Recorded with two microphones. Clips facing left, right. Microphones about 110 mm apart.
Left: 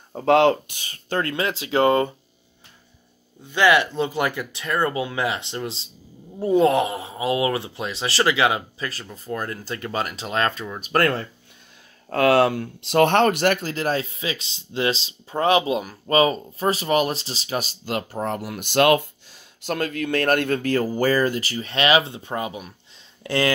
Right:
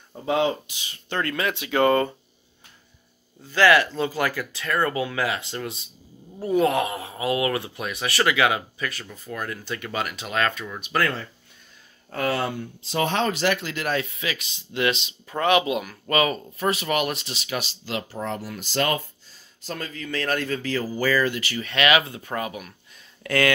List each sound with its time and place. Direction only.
0.1 s speech: 70° left (ahead or behind); by 1.0 s 50° left (ahead or behind)
1.1 s speech: 30° left (ahead or behind)
3.5 s speech: 20° left (ahead or behind)
10.8 s speech: 50° left (ahead or behind)
12.1 s speech: 80° left; by 23.5 s 30° left (ahead or behind)